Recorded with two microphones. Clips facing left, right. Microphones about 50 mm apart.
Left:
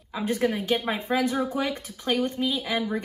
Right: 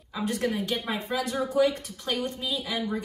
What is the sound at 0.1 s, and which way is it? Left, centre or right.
A woman's voice, left.